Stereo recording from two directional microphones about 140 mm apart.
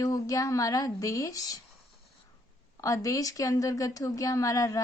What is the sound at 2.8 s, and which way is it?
A woman's voice, 25° left (ahead or behind).